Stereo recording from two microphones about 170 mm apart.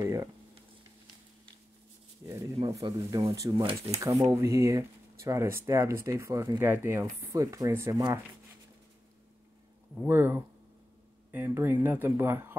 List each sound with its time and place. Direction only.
0.0 s a sound: 20° right (ahead or behind)
2.6 s speech: 25° right (ahead or behind)
10.0 s speech: 15° right (ahead or behind)